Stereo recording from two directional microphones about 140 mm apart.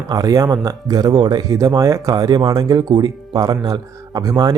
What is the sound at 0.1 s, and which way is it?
Speech, 25° right (ahead or behind).